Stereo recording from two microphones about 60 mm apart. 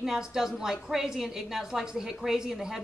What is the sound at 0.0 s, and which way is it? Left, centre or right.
A woman's voice, centre.